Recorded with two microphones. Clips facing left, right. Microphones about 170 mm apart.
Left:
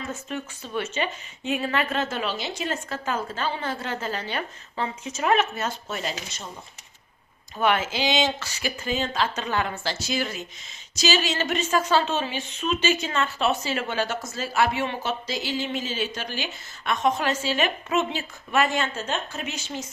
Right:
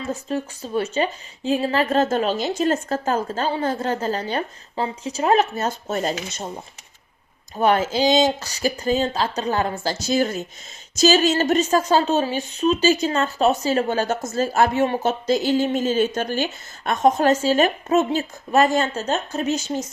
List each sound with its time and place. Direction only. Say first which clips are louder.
0.1 s a woman's voice: right 7 dB; 35° right (ahead or behind)
7.5 s a woman's voice: right 5 dB; 40° right (ahead or behind)